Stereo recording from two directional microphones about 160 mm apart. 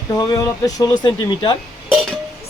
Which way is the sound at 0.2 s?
25° left (ahead or behind).